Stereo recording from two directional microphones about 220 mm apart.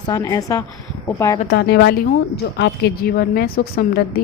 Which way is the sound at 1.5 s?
50° left (ahead or behind).